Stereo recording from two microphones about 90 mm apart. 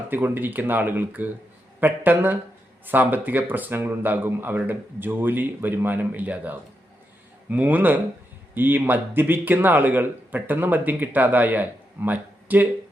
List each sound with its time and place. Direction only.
0.1 s speech: 20° right (ahead or behind)